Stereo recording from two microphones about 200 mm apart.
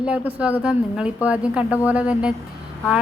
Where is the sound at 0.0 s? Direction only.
5° right (ahead or behind).